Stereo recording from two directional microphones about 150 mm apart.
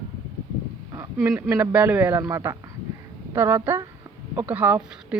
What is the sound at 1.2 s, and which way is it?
A man's voice, 20° right (ahead or behind).